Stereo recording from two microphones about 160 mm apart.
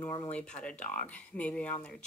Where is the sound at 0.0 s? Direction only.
25° left (ahead or behind).